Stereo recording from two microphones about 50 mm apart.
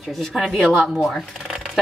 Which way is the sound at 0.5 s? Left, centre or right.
Centre.